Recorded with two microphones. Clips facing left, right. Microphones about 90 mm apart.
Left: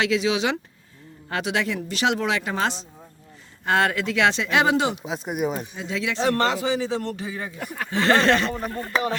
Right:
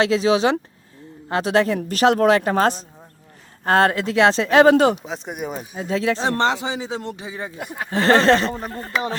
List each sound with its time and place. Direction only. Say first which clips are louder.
0.0 s speech: right 5 dB; 35° right (ahead or behind)
5.0 s speech: left 3 dB; 5° left (ahead or behind)
5.7 s speech: right 6 dB; 40° right (ahead or behind)
6.2 s a man's voice: right 1 dB; 25° right (ahead or behind)
7.9 s speech: right 4 dB; 35° right (ahead or behind)